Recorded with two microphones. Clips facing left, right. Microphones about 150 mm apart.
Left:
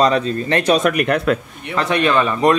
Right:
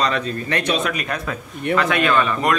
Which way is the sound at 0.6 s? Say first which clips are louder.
Left 7 dB; 45° left (ahead or behind).